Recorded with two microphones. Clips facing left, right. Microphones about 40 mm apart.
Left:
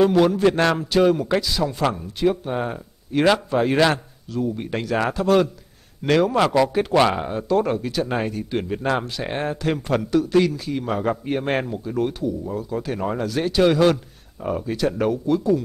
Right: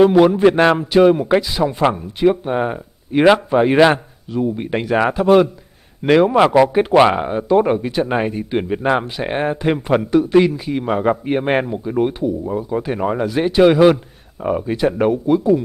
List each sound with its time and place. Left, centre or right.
0.0 s speech: right